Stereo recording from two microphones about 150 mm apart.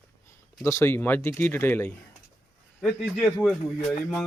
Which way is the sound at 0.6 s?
15° left (ahead or behind).